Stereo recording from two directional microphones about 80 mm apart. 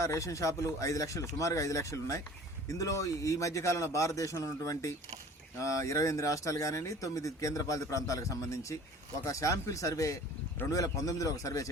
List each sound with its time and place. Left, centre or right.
0.0 s speech: left